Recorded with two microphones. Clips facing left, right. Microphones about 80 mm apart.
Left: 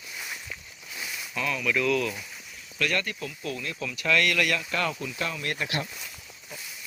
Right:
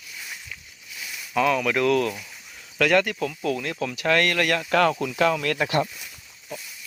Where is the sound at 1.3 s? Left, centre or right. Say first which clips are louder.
Right 7 dB; right.